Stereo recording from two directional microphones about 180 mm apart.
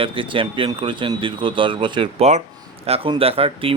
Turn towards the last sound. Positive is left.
turn(degrees=-30)  # may be behind; listen again after turning